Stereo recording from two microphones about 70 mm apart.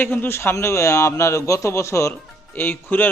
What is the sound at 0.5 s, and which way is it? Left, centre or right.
A man's voice, left.